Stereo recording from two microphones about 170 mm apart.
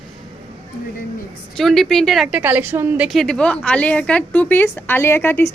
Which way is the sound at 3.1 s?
5° left (ahead or behind).